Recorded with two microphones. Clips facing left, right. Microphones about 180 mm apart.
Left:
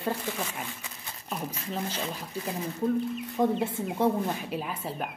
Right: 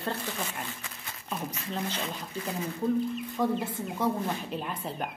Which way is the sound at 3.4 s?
25° left (ahead or behind).